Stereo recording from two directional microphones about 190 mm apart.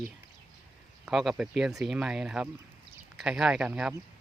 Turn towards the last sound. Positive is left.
turn(degrees=-5)  # may be behind; listen again after turning